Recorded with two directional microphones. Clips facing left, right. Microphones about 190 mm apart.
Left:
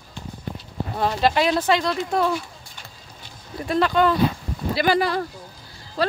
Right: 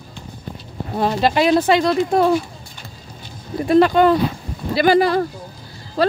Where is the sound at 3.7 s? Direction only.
15° right (ahead or behind).